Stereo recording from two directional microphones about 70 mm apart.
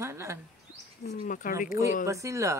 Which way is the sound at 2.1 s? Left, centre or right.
Right.